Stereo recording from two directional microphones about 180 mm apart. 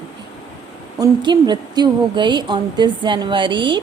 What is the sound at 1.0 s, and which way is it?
A woman's voice, 25° right (ahead or behind).